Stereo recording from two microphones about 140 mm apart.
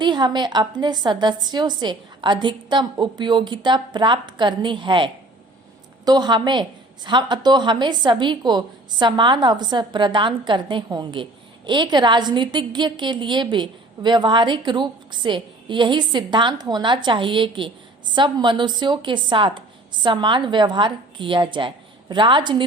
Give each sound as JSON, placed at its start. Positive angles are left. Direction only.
{"t": 0.0, "sound": "a woman's voice", "side_deg": -30}